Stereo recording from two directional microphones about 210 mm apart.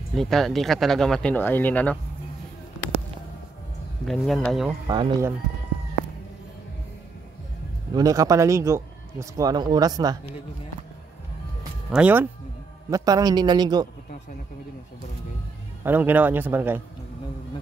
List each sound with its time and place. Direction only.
0.1 s speech: centre (ahead or behind)
4.0 s speech: centre (ahead or behind)
4.8 s a man's voice: 20° right (ahead or behind)
7.9 s a man's voice: 15° right (ahead or behind)
11.9 s a man's voice: 5° right (ahead or behind)
15.8 s a man's voice: 10° right (ahead or behind)